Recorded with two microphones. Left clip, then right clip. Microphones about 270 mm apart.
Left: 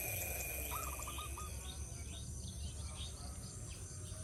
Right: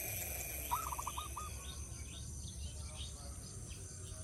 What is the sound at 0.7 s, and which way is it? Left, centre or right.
Owl, centre.